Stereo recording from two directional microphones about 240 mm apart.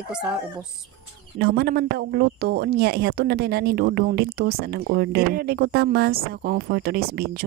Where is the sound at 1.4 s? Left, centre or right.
Right.